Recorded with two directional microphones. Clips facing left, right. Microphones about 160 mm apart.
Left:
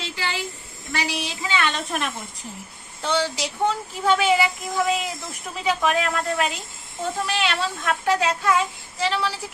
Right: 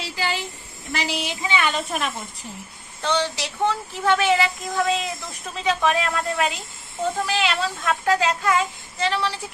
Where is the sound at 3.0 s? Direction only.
10° left (ahead or behind).